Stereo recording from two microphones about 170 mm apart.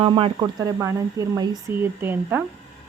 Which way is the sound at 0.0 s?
30° right (ahead or behind).